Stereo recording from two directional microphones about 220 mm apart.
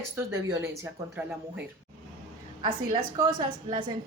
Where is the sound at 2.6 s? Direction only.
20° right (ahead or behind).